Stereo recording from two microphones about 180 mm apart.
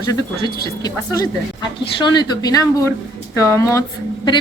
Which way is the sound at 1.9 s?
25° left (ahead or behind).